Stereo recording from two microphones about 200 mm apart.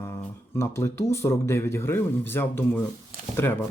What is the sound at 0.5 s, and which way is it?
Speech, 15° left (ahead or behind).